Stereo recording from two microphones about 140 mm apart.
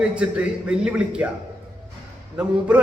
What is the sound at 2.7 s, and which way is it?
Speech, 10° right (ahead or behind).